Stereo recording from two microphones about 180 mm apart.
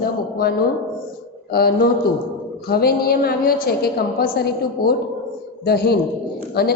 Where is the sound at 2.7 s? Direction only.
55° left (ahead or behind).